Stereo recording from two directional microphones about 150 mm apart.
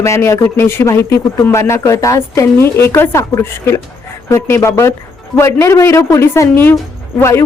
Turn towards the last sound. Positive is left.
turn(degrees=20)  # may be behind; listen again after turning